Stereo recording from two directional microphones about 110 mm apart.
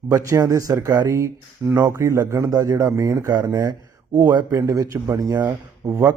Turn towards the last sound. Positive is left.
turn(degrees=-35)  # may be behind; listen again after turning